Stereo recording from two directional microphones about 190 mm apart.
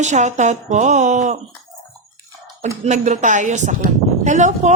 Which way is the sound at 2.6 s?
40° right (ahead or behind).